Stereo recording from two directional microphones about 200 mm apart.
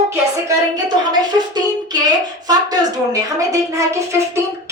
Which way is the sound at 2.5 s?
20° right (ahead or behind).